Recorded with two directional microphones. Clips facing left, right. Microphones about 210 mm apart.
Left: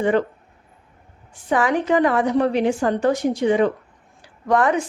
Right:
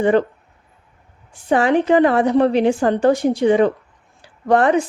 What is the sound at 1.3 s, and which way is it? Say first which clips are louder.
Speech: right 4 dB; 30° right (ahead or behind).